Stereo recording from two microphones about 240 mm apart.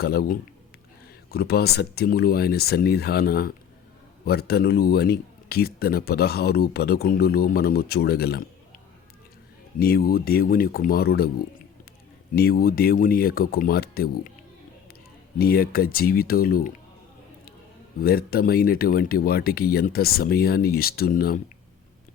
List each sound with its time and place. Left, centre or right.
0.0 s speech: left
9.7 s speech: left
12.3 s speech: left
15.4 s speech: left
18.0 s speech: left